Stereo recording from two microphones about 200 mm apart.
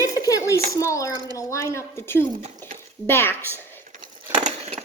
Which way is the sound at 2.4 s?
35° right (ahead or behind).